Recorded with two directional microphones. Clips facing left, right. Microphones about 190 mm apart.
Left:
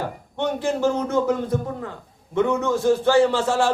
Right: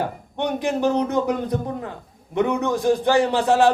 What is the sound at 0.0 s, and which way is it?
A man's voice, 15° right (ahead or behind).